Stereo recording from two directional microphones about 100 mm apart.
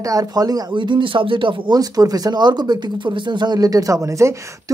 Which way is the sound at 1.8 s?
40° right (ahead or behind).